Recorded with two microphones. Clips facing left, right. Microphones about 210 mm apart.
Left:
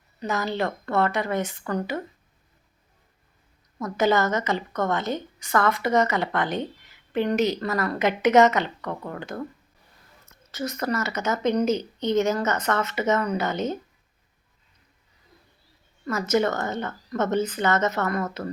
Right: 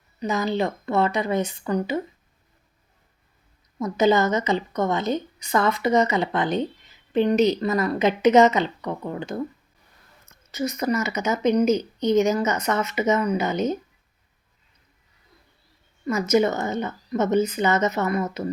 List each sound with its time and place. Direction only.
0.2 s a woman's voice: 15° right (ahead or behind)
3.8 s a woman's voice: 15° right (ahead or behind)
10.5 s a woman's voice: 10° right (ahead or behind)
16.0 s a woman's voice: 15° right (ahead or behind)